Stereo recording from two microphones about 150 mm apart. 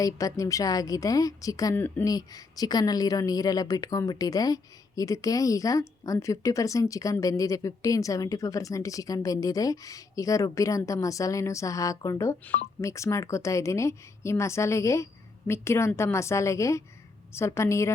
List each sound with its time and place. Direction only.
0.0 s speech: 25° left (ahead or behind)
2.0 s speech: 25° left (ahead or behind)